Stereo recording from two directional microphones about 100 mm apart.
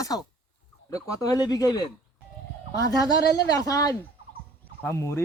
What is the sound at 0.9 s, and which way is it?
Speech, 35° left (ahead or behind).